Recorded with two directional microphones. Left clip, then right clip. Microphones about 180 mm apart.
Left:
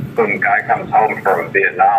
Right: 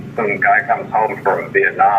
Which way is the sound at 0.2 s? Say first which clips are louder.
Even; 20° left (ahead or behind).